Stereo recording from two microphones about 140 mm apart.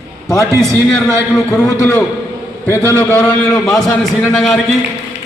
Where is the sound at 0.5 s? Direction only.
20° right (ahead or behind).